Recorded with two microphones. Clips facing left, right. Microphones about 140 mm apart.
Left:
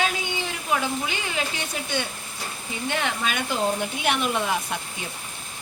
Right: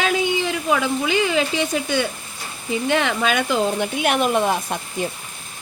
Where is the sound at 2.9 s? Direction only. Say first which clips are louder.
Right 6 dB; 90° right.